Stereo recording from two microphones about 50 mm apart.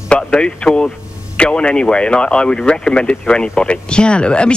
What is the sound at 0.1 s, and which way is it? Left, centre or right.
Speech, centre.